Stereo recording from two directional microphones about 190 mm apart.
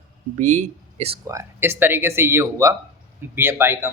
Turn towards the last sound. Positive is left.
turn(degrees=-15)  # may be behind; listen again after turning